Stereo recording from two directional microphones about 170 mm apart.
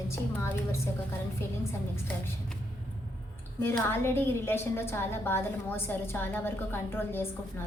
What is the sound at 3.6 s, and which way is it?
A woman's voice, 15° left (ahead or behind).